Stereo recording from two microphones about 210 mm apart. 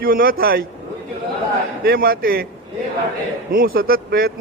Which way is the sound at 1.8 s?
45° right (ahead or behind).